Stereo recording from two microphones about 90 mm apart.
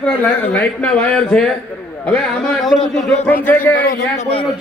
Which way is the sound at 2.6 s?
Centre (ahead or behind).